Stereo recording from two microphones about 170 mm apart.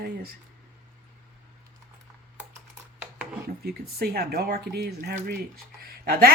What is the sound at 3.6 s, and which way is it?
Speech, 65° right (ahead or behind).